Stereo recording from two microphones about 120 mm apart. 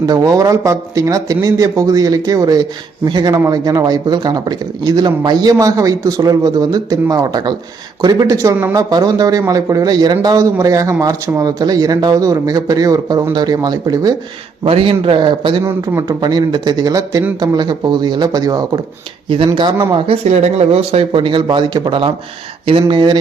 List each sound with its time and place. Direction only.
0.0 s speech: 35° right (ahead or behind)
14.6 s speech: 50° right (ahead or behind)
15.6 s speech: 30° right (ahead or behind)
19.5 s speech: 40° right (ahead or behind)
20.2 s speech: 65° right (ahead or behind); by 23.2 s 40° right (ahead or behind)